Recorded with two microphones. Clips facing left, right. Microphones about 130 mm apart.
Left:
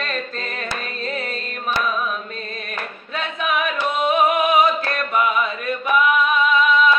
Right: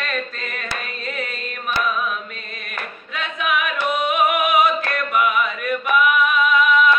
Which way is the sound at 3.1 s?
25° left (ahead or behind).